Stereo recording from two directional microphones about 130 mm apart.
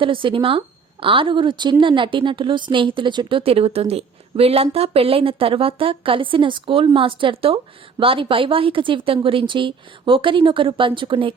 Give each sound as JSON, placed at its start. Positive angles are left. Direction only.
{"t": 0.0, "sound": "speech", "side_deg": -40}